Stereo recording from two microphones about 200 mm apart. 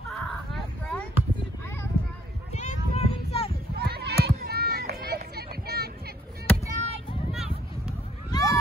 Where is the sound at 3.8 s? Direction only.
55° right (ahead or behind).